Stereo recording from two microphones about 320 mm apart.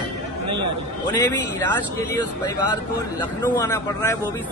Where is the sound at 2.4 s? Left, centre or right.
Centre.